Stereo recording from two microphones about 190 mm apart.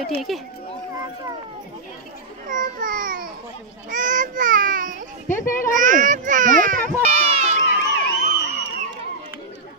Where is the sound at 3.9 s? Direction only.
45° right (ahead or behind).